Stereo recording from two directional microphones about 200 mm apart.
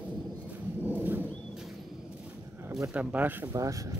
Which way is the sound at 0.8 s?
10° right (ahead or behind).